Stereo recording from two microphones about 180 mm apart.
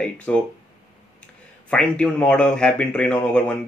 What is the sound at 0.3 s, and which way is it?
Speech, 10° left (ahead or behind).